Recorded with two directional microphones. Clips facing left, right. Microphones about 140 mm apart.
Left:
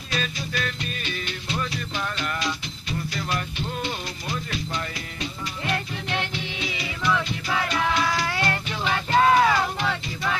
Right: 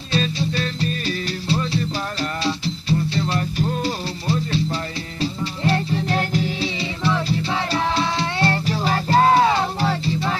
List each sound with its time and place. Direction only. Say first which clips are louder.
0.1 s music: right 7 dB; 30° right (ahead or behind)